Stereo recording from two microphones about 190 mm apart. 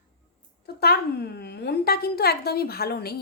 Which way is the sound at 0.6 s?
55° left (ahead or behind).